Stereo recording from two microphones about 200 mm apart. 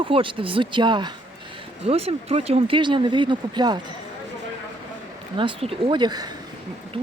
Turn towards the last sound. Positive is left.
turn(degrees=-20)  # may be behind; listen again after turning